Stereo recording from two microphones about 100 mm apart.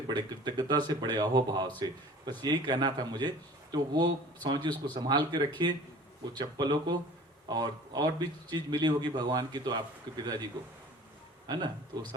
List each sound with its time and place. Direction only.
0.1 s a man's voice: 45° right (ahead or behind)
11.4 s speech: 45° right (ahead or behind)